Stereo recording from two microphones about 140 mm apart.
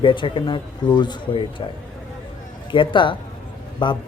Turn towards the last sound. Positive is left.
turn(degrees=35)  # may be behind; listen again after turning